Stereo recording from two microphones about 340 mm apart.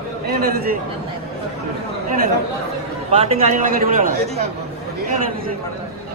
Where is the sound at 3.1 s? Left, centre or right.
Centre.